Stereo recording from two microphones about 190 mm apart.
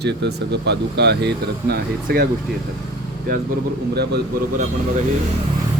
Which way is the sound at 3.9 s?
60° right (ahead or behind).